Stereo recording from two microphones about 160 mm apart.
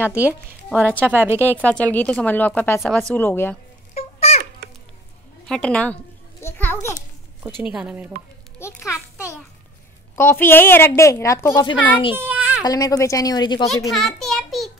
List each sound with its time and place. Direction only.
0.0 s speech: 10° right (ahead or behind)
1.6 s a woman's voice: 10° left (ahead or behind)
3.9 s a sound: 45° left (ahead or behind)
5.5 s a woman's voice: 5° left (ahead or behind)
7.6 s speech: 5° right (ahead or behind)
8.5 s a child's voice: 15° left (ahead or behind)
10.1 s a woman's voice: 15° left (ahead or behind); by 11.9 s 30° left (ahead or behind)
12.2 s a sound: 10° right (ahead or behind)
12.6 s speech: 20° left (ahead or behind)
13.8 s a sound: centre (ahead or behind)